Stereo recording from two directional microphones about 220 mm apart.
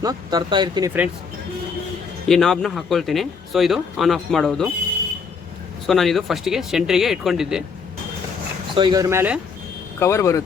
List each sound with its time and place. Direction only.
0.0 s speech: 15° right (ahead or behind)
2.2 s speech: centre (ahead or behind)
5.9 s speech: centre (ahead or behind)
8.7 s speech: 20° right (ahead or behind)
10.0 s speech: 15° left (ahead or behind)